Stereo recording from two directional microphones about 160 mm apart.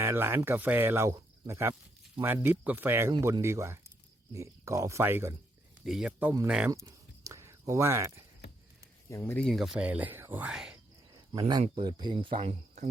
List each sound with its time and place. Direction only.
0.0 s speech: 15° right (ahead or behind)
3.1 s speech: 25° right (ahead or behind)
5.8 s speech: 5° right (ahead or behind)
6.7 s a sound: 20° right (ahead or behind)
9.0 s speech: 15° left (ahead or behind); by 10.8 s 5° right (ahead or behind)
11.1 s cricket: 25° right (ahead or behind)
11.7 s speech: 30° right (ahead or behind); by 12.9 s 50° right (ahead or behind)